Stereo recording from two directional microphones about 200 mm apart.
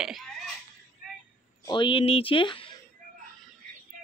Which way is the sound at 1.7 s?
25° left (ahead or behind).